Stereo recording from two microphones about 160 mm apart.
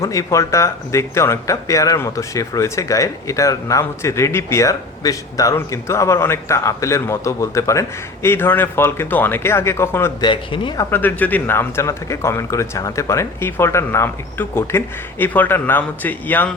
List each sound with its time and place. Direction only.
0.0 s speech: 20° left (ahead or behind)
10.2 s speech: 30° left (ahead or behind)
10.9 s speech: 10° left (ahead or behind)